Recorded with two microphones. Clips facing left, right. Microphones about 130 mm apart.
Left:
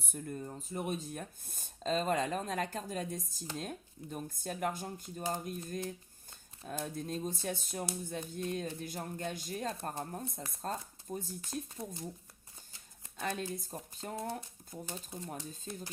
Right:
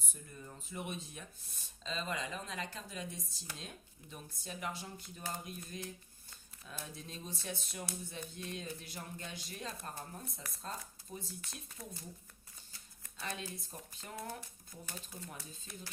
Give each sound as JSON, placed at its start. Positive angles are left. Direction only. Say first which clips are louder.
{"t": 0.0, "sound": "speech", "louder": "left 11 dB", "side_deg": 60}
{"t": 0.4, "sound": "speech", "louder": "left 2 dB", "side_deg": 40}
{"t": 6.7, "sound": "speech", "louder": "left 10 dB", "side_deg": 50}
{"t": 13.1, "sound": "speech", "louder": "left 6 dB", "side_deg": 50}
{"t": 14.7, "sound": "speech", "louder": "left 7 dB", "side_deg": 25}